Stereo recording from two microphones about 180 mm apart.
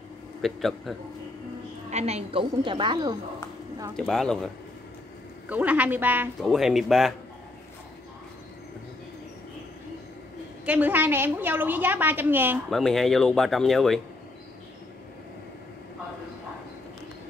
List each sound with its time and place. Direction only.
0.4 s speech: centre (ahead or behind)
1.9 s a woman's voice: 35° right (ahead or behind)
3.9 s speech: 5° left (ahead or behind)
5.5 s a woman's voice: 10° right (ahead or behind)
10.6 s a woman's voice: 10° right (ahead or behind)
12.6 s speech: centre (ahead or behind)